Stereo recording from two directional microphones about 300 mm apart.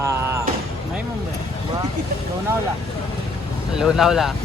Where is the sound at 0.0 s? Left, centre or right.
Centre.